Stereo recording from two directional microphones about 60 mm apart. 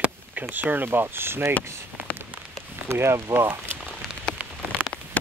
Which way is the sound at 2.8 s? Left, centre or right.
Right.